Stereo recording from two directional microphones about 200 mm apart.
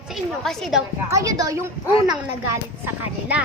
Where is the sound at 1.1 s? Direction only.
15° right (ahead or behind).